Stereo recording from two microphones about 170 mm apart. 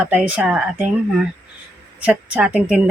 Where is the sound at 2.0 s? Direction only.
5° right (ahead or behind).